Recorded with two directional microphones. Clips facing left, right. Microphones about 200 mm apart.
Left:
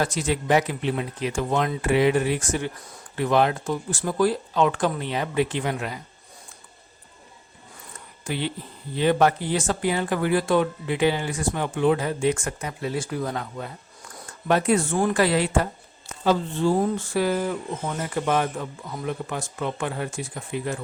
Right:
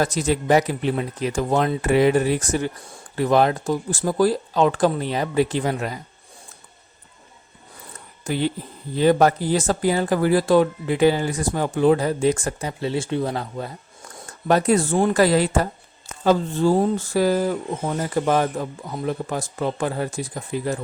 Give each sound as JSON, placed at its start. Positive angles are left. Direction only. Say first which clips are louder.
{"t": 0.0, "sound": "speech", "louder": "right 3 dB", "side_deg": -40}
{"t": 8.2, "sound": "speech", "louder": "right 5 dB", "side_deg": -40}